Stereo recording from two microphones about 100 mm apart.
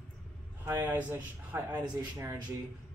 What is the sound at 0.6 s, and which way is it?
Speech, 25° right (ahead or behind).